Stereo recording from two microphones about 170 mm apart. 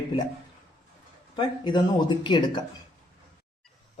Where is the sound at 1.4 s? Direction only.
25° left (ahead or behind).